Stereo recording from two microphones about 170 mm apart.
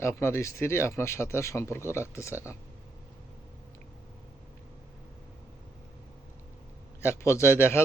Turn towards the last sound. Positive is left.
turn(degrees=15)  # may be behind; listen again after turning